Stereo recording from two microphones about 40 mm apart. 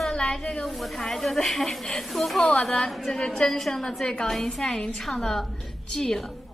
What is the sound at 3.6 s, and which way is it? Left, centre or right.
A woman's voice, centre.